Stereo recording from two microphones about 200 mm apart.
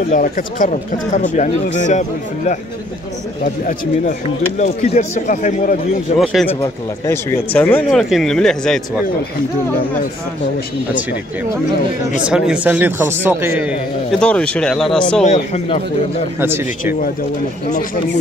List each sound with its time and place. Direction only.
0.1 s speech: 40° left (ahead or behind)
4.6 s speech: 35° left (ahead or behind)
6.1 s speech: centre (ahead or behind)
12.3 s a man's voice: 5° right (ahead or behind)
14.2 s speech: 5° left (ahead or behind)
15.2 s speech: 35° left (ahead or behind)
16.3 s a man's voice: 10° right (ahead or behind)